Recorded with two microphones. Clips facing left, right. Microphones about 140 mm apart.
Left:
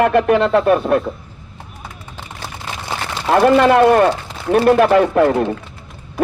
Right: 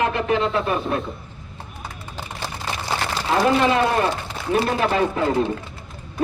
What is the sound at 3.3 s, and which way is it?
A man's voice, 65° left (ahead or behind).